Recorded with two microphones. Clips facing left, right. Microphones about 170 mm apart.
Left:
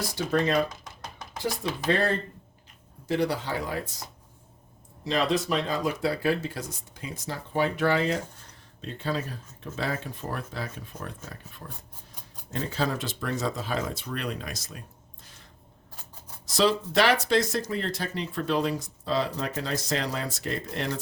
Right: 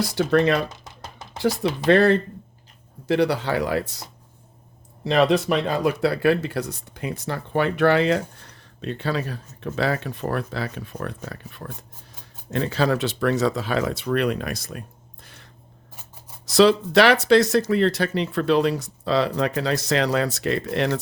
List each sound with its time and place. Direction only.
0.0 s speech: 70° right (ahead or behind)
5.0 s speech: 65° right (ahead or behind)
16.5 s speech: 75° right (ahead or behind)